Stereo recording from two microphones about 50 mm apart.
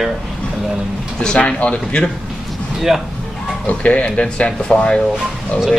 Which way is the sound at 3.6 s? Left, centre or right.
Left.